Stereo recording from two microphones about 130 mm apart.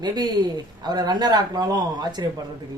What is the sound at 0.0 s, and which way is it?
Speech, 35° right (ahead or behind).